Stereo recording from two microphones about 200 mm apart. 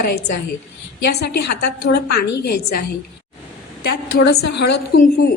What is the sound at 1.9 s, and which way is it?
Speech, 55° left (ahead or behind).